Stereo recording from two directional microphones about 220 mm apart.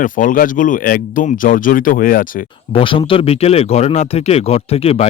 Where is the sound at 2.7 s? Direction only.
25° left (ahead or behind).